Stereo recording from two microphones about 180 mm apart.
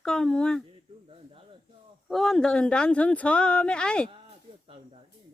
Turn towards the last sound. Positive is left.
turn(degrees=5)  # may be behind; listen again after turning